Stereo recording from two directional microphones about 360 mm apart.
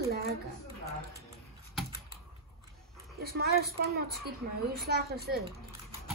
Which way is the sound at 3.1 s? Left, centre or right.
Right.